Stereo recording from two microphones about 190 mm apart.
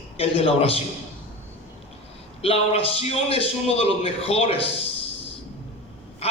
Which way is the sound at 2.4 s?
30° left (ahead or behind).